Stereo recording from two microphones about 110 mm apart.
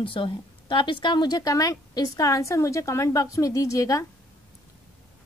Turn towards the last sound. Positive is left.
turn(degrees=30)  # may be behind; listen again after turning